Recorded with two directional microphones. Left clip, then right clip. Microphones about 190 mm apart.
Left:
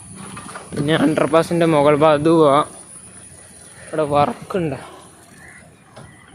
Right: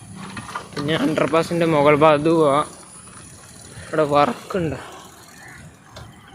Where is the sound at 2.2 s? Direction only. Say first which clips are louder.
Left 3 dB; 20° left (ahead or behind).